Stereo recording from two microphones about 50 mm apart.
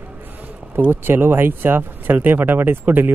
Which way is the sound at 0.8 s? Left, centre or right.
Right.